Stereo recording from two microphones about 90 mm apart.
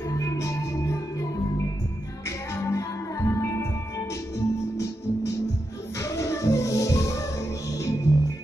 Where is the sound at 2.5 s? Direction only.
35° left (ahead or behind).